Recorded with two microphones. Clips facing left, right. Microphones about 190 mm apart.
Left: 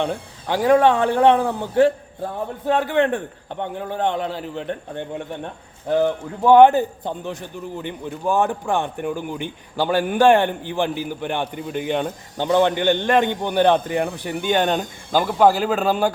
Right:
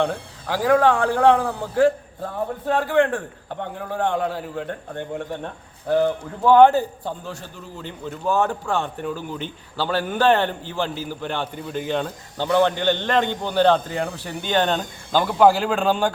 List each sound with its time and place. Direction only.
0.0 s a man's voice: 20° left (ahead or behind)
15.4 s speech: centre (ahead or behind)